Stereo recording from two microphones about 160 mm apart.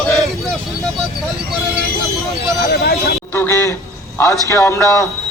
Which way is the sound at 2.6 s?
75° left (ahead or behind).